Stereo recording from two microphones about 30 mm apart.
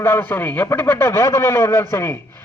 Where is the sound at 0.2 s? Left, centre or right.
Left.